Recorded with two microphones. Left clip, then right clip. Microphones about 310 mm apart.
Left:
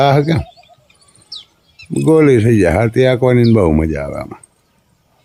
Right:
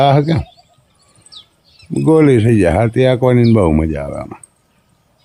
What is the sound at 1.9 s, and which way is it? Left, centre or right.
Speech, centre.